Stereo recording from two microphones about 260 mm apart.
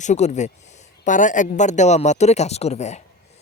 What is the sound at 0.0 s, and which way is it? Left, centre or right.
Speech, left.